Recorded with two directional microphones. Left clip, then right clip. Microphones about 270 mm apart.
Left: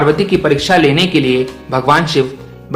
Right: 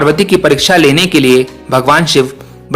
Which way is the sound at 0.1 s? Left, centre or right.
Right.